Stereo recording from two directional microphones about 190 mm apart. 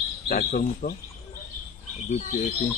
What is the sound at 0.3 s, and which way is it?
Speech, 45° left (ahead or behind).